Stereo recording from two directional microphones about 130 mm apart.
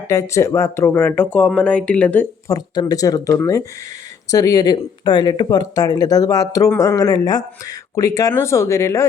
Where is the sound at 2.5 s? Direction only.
25° left (ahead or behind).